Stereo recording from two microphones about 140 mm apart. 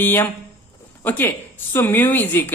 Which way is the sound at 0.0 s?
15° left (ahead or behind).